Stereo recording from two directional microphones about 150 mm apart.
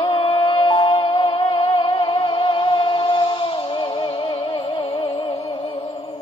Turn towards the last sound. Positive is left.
turn(degrees=35)  # may be behind; listen again after turning